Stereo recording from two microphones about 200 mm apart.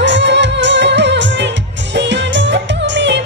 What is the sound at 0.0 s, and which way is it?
Music, 60° right (ahead or behind).